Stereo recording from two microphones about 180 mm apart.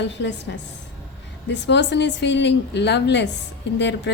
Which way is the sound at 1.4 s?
80° left.